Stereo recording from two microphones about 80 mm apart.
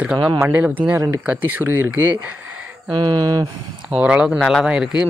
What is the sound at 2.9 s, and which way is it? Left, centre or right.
Speech, right.